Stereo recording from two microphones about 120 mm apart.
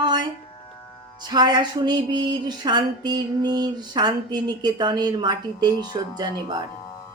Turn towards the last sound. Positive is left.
turn(degrees=-35)  # may be behind; listen again after turning